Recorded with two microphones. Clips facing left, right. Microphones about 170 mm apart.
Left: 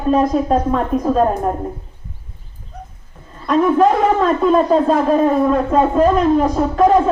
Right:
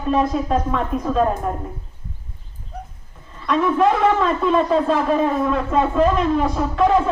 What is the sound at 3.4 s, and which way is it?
A man's voice, 40° left (ahead or behind).